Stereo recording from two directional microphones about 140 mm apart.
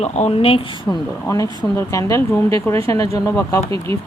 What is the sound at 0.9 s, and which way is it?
Speech, 25° left (ahead or behind).